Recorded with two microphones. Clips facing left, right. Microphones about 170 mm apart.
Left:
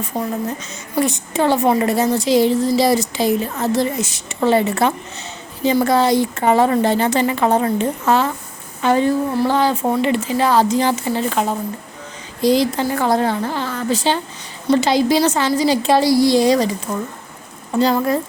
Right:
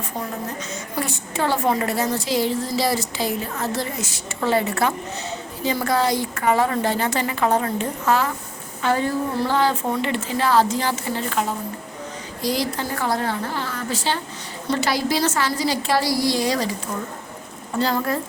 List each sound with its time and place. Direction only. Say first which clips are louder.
1.0 s a woman's voice: left 7 dB; 20° left (ahead or behind)
17.7 s speech: left 6 dB; 15° left (ahead or behind)